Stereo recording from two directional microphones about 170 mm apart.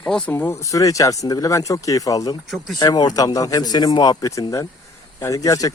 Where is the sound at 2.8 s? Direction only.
25° left (ahead or behind).